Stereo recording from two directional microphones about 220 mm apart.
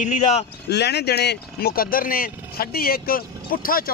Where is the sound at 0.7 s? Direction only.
50° left (ahead or behind).